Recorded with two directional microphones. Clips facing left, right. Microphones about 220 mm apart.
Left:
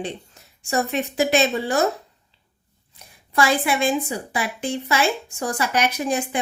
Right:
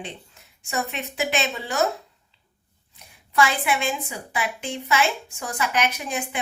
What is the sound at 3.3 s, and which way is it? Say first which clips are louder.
A woman's voice: left 2 dB; 40° left (ahead or behind).